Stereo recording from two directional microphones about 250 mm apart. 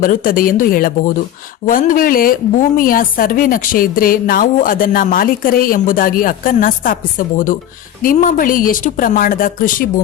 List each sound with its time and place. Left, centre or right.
0.0 s a woman's voice: left